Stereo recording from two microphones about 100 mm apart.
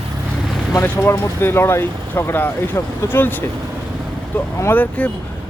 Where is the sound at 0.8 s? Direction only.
25° left (ahead or behind).